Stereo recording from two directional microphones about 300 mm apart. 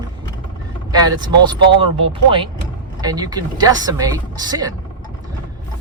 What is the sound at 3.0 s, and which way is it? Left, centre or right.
Speech, centre.